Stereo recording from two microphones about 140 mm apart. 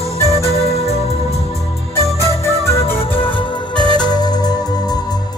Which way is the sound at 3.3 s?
35° left (ahead or behind).